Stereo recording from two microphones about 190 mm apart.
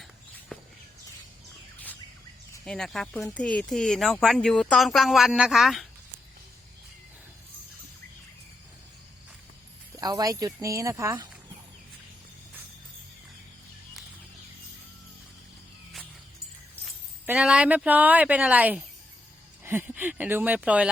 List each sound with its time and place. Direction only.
0.0 s walk: 5° left (ahead or behind)
2.6 s speech: 5° left (ahead or behind)
10.0 s speech: 20° right (ahead or behind)
16.8 s speech: 5° right (ahead or behind)